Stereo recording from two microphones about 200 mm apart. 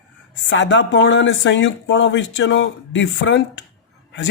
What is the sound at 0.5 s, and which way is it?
Speech, 65° left (ahead or behind).